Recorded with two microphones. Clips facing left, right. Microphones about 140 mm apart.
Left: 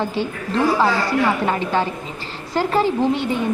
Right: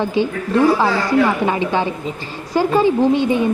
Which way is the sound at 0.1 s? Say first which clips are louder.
Right 5 dB; 15° right (ahead or behind).